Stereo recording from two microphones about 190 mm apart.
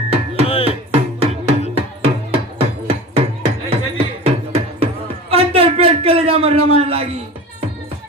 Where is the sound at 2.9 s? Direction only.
35° right (ahead or behind).